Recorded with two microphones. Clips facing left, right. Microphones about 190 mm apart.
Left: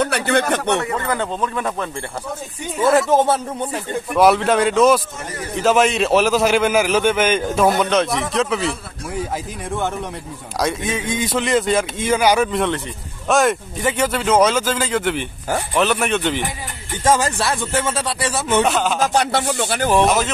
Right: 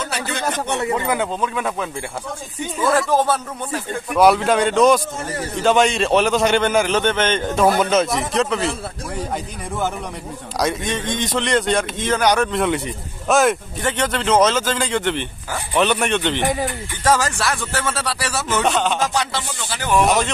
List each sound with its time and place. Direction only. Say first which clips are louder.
0.0 s speech: left 6 dB; 60° left (ahead or behind)
0.8 s speech: right 2 dB; 15° right (ahead or behind)
3.1 s speech: left 2 dB; 20° left (ahead or behind)
4.1 s a man's voice: even; centre (ahead or behind)
10.6 s a man's voice: even; centre (ahead or behind)
17.0 s speech: left 1 dB; 25° left (ahead or behind)
18.6 s a man's voice: even; 5° left (ahead or behind)
19.0 s speech: left 5 dB; 55° left (ahead or behind)